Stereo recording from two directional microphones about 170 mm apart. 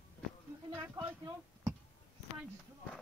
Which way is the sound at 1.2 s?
15° right (ahead or behind).